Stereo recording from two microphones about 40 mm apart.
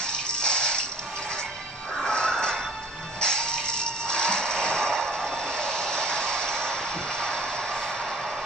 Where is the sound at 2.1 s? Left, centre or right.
Centre.